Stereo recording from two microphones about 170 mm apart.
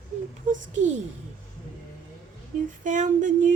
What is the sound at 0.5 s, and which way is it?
Speech, 45° right (ahead or behind).